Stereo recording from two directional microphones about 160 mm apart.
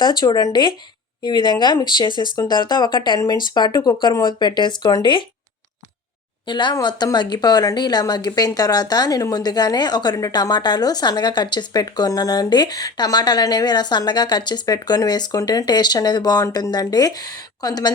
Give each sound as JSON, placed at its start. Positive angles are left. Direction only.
{"t": 0.0, "sound": "speech", "side_deg": 25}
{"t": 6.5, "sound": "speech", "side_deg": 30}